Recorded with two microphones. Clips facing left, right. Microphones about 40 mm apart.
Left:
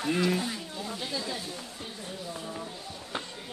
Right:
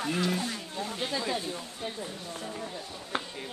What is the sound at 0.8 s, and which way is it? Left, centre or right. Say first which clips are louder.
Speech: right 4 dB; right.